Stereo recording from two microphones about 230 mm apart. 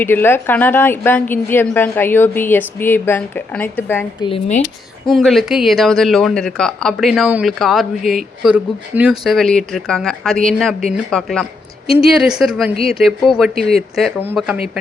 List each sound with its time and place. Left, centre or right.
0.0 s a woman's voice: centre
4.3 s speech: left
5.0 s speech: centre